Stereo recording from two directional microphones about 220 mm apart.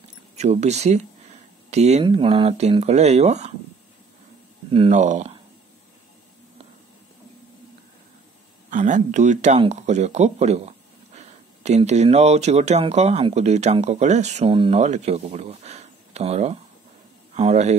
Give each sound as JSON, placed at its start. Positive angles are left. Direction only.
{"t": 0.4, "sound": "speech", "side_deg": -30}
{"t": 4.6, "sound": "speech", "side_deg": -25}
{"t": 8.6, "sound": "speech", "side_deg": -35}